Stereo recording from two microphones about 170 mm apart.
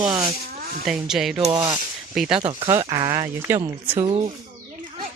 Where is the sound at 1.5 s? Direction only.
25° right (ahead or behind).